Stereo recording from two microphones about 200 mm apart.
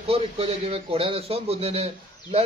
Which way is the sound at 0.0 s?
30° right (ahead or behind).